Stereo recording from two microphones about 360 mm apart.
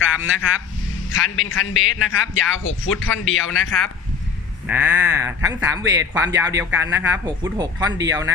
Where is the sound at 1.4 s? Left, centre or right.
Left.